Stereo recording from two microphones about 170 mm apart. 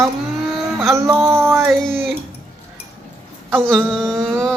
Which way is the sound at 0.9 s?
15° right (ahead or behind).